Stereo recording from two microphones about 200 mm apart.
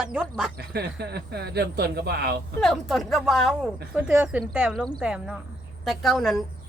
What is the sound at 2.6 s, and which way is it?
Speech, centre (ahead or behind).